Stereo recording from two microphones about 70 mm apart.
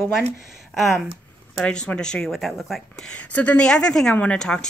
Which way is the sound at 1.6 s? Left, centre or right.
Centre.